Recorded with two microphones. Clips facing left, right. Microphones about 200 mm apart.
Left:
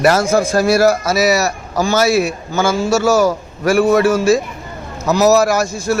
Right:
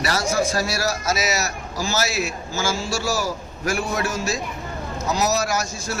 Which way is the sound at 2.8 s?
55° left (ahead or behind).